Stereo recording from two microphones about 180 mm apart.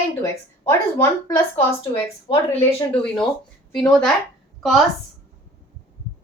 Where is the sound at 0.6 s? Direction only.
15° left (ahead or behind).